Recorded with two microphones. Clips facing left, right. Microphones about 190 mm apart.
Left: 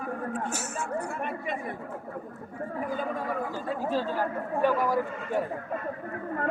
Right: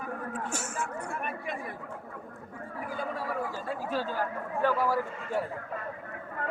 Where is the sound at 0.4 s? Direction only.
5° left (ahead or behind).